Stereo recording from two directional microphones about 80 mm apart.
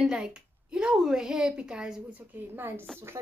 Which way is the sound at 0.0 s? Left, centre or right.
Centre.